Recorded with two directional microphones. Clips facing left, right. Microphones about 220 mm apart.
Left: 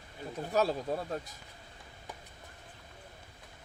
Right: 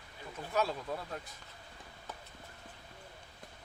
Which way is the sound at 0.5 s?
40° left (ahead or behind).